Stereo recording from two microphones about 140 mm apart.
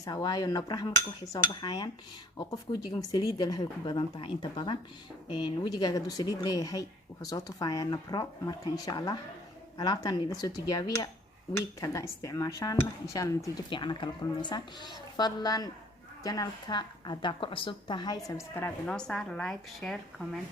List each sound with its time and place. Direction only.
0.0 s a woman's voice: 30° left (ahead or behind)
3.1 s a woman's voice: 30° left (ahead or behind)
13.7 s a woman's voice: 35° left (ahead or behind); by 20.4 s centre (ahead or behind)